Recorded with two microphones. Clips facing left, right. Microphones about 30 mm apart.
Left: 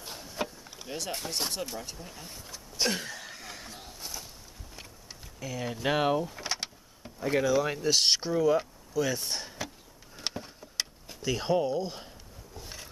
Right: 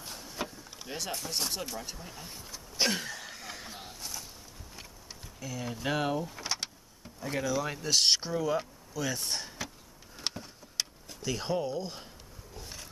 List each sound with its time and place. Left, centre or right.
0.0 s vehicle: centre
1.5 s speech: centre
4.0 s a sound: centre
5.4 s speech: centre
6.2 s speech: centre
10.1 s a sound: centre